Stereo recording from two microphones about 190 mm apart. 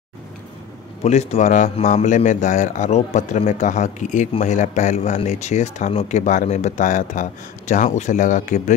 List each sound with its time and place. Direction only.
1.0 s a man's voice: 35° left (ahead or behind)